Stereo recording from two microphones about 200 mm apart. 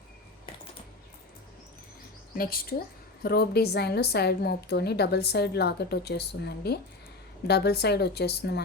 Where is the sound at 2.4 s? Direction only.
50° left (ahead or behind).